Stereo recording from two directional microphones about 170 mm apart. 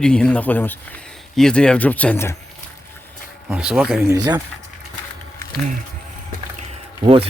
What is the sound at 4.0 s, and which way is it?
Speech, 20° right (ahead or behind).